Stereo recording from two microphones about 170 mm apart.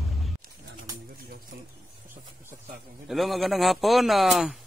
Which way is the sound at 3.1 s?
Centre (ahead or behind).